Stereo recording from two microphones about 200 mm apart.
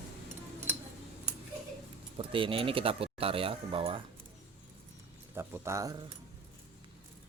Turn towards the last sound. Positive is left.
turn(degrees=-15)  # may be behind; listen again after turning